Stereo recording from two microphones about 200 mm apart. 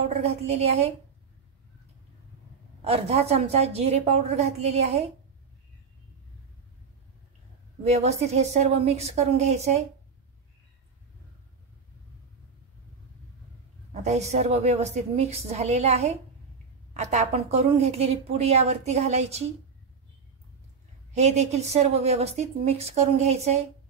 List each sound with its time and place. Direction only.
0.1 s a woman's voice: 30° right (ahead or behind)
2.8 s a woman's voice: 30° right (ahead or behind)
7.8 s a woman's voice: 35° right (ahead or behind)
14.0 s a woman's voice: 35° right (ahead or behind)
21.1 s a woman's voice: 35° right (ahead or behind)